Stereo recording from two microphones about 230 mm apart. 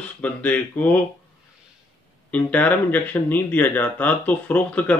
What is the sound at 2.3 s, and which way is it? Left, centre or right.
Speech, centre.